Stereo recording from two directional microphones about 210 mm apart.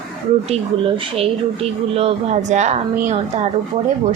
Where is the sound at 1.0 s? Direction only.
25° right (ahead or behind).